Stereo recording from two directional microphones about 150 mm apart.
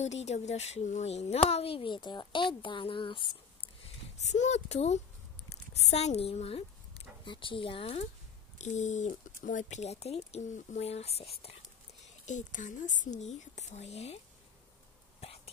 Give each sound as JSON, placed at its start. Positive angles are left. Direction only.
{"t": 0.0, "sound": "a woman's voice", "side_deg": 45}
{"t": 4.2, "sound": "a woman's voice", "side_deg": 50}
{"t": 8.5, "sound": "speech", "side_deg": 50}
{"t": 12.3, "sound": "speech", "side_deg": 55}
{"t": 15.1, "sound": "hiccup", "side_deg": 40}